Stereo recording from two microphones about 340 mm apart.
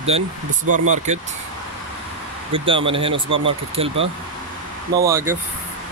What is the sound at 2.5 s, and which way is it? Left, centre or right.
Speech, centre.